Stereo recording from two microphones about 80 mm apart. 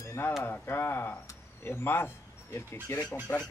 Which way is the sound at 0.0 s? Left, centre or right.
Left.